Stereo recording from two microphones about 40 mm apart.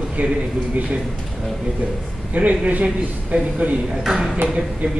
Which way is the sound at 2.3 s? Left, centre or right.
Right.